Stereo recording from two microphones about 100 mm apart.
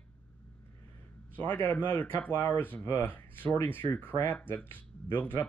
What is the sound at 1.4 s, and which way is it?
Speech, 15° left (ahead or behind).